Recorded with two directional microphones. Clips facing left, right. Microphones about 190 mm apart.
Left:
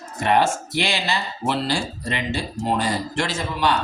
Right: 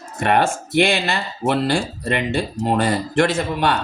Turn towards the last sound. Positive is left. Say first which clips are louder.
# right 3 dB
turn(degrees=-55)  # may be behind; listen again after turning